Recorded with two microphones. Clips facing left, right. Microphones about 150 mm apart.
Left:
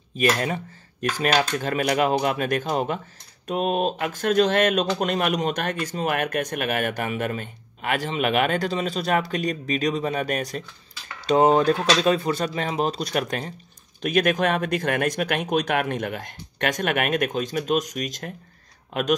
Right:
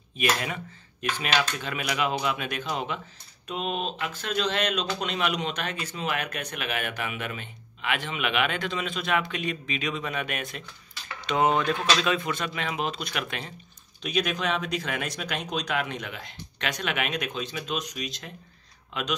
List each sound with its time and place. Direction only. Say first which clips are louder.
0.1 s speech: left 5 dB; 40° left (ahead or behind)
14.0 s speech: left 7 dB; 50° left (ahead or behind)